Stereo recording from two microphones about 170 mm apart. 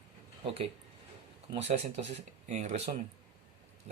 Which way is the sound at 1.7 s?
35° right (ahead or behind).